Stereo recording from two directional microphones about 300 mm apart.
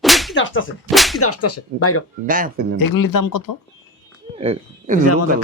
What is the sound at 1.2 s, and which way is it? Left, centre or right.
Speech, left.